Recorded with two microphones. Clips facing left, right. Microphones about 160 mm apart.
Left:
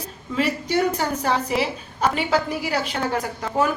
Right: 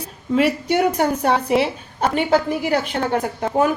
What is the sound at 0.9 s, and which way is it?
A woman's voice, 60° right (ahead or behind).